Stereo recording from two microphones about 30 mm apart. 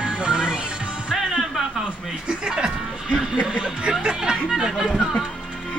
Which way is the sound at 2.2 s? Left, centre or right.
Right.